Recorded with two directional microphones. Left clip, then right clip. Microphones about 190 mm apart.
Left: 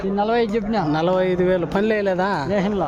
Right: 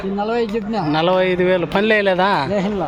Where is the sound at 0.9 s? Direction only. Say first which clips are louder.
Right 5 dB; 5° left (ahead or behind).